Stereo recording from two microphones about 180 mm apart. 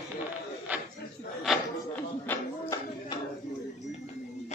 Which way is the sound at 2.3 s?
10° left (ahead or behind).